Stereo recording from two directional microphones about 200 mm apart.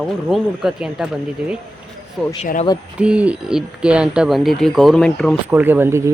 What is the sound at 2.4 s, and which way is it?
Speech, 35° left (ahead or behind).